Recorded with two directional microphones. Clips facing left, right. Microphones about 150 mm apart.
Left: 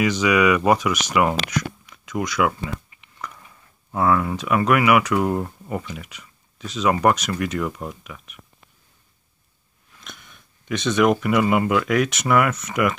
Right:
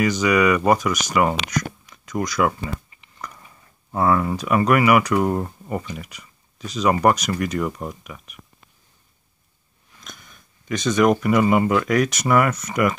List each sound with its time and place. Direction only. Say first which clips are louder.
0.2 s speech: left 1 dB; 5° left (ahead or behind)
1.5 s a sound: even; 5° left (ahead or behind)
3.9 s speech: even; centre (ahead or behind)
9.9 s speech: even; centre (ahead or behind)